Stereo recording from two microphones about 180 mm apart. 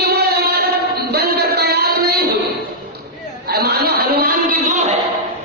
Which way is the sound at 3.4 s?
60° right (ahead or behind).